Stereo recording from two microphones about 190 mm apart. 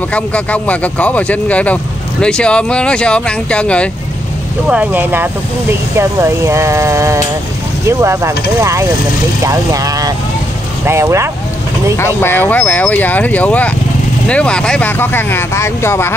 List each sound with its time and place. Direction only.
0.1 s speech: 5° left (ahead or behind)
4.6 s speech: 5° right (ahead or behind)
12.0 s speech: 10° left (ahead or behind)